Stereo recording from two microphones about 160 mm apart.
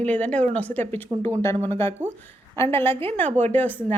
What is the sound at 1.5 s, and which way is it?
Speech, 35° right (ahead or behind).